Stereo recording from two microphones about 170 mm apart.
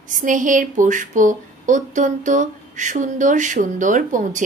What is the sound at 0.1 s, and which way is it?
A woman's voice, 50° right (ahead or behind).